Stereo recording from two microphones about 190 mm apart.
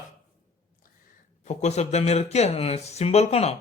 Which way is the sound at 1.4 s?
40° left (ahead or behind).